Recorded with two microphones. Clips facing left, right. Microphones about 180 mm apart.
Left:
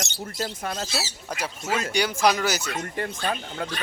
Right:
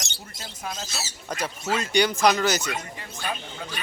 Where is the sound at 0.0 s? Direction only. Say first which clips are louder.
Left 10 dB; 60° left (ahead or behind).